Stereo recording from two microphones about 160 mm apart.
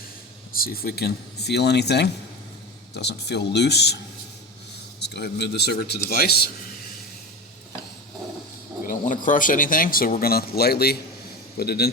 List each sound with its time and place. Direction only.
0.5 s speech: 65° left (ahead or behind); by 3.9 s 90° left
4.9 s speech: 90° left; by 6.5 s 75° left (ahead or behind)
8.9 s a man's voice: 55° left (ahead or behind); by 11.9 s 80° left